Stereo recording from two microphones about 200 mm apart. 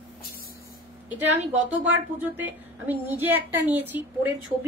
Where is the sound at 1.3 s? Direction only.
10° right (ahead or behind).